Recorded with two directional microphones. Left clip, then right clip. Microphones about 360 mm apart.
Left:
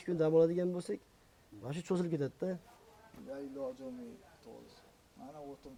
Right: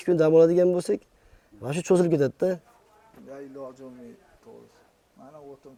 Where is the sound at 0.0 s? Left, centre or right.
Right.